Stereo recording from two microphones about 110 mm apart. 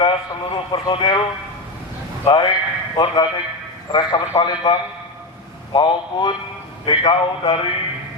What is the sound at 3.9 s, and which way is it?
A man's voice, 40° left (ahead or behind).